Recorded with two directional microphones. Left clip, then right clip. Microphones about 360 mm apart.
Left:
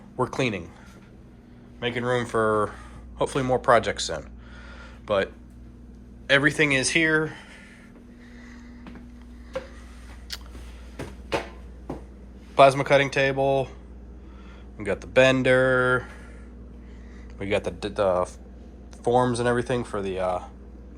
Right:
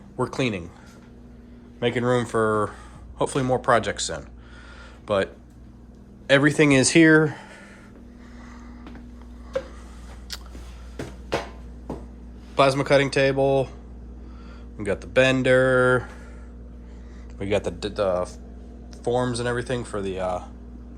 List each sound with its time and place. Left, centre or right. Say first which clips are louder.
0.2 s speech: even; centre
1.8 s speech: right 3 dB; centre
10.3 s a sound: even; centre
12.5 s speech: left 2 dB; centre
14.8 s speech: left 1 dB; centre
17.3 s a man's voice: right 1 dB; centre